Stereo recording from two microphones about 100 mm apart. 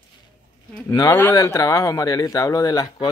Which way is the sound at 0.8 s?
35° left (ahead or behind).